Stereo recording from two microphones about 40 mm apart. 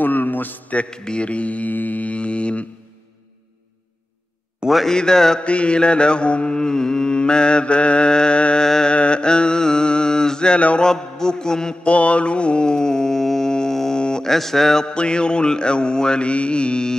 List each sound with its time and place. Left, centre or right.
0.0 s a man's voice: left
0.8 s mantra: left
4.8 s mantra: centre
5.4 s mantra: left
8.6 s mantra: centre
8.9 s mantra: left
11.9 s mantra: left; by 13.5 s centre
13.5 s music: centre
14.3 s mantra: centre; by 16.9 s left